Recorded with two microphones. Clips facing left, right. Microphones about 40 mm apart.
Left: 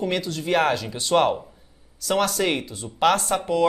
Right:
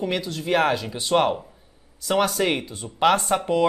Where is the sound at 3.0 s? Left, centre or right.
Centre.